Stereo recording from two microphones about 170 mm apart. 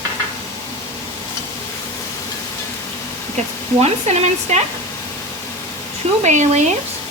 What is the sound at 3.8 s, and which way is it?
Sizzle, 40° right (ahead or behind).